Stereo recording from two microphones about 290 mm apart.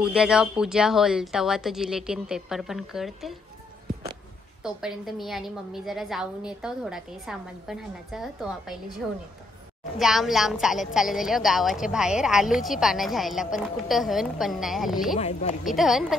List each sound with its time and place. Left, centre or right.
0.0 s a woman's voice: centre
4.6 s a woman's voice: centre
9.9 s a woman's voice: centre
15.1 s speech: left
15.6 s a woman's voice: centre